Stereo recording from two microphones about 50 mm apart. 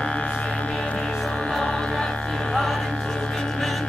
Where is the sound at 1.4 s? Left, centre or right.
Centre.